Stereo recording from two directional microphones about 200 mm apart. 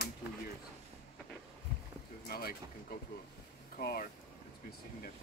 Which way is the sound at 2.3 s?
50° left (ahead or behind).